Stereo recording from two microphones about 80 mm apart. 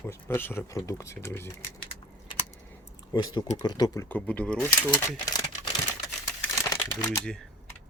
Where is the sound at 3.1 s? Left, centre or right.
Left.